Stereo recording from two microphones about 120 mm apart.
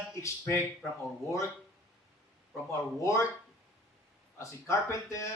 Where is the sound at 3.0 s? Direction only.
25° left (ahead or behind).